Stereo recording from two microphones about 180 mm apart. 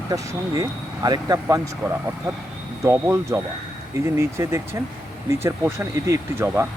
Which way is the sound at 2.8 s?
15° right (ahead or behind).